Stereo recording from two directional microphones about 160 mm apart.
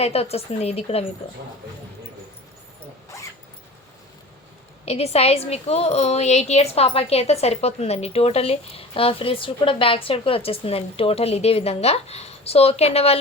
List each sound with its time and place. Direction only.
0.0 s a woman's voice: 40° left (ahead or behind)
4.9 s a woman's voice: 40° left (ahead or behind)